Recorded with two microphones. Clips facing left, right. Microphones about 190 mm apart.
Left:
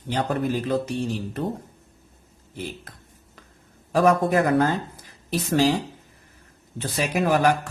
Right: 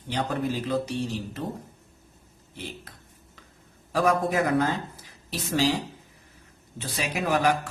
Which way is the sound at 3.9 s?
50° left (ahead or behind).